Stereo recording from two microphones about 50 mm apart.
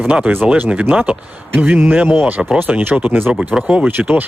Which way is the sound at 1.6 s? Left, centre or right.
Right.